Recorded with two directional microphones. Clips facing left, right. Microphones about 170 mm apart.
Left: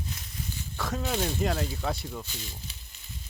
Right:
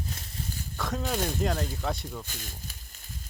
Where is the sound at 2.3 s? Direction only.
50° right (ahead or behind).